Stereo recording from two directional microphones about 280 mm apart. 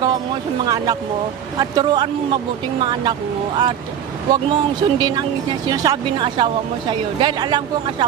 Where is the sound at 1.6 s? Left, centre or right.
Centre.